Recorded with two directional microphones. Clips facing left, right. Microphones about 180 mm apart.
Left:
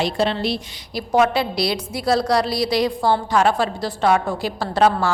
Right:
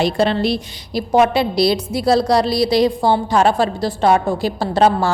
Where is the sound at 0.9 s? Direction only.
25° right (ahead or behind).